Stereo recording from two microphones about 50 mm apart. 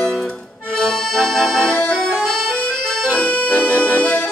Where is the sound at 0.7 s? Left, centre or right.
Centre.